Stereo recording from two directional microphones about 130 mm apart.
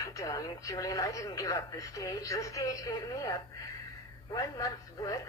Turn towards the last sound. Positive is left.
turn(degrees=25)  # may be behind; listen again after turning